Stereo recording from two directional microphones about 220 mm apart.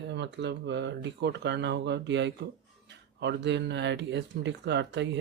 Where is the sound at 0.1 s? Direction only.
50° right (ahead or behind).